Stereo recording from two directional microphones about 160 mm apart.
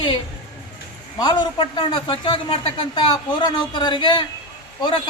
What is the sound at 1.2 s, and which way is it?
A man's voice, 30° left (ahead or behind).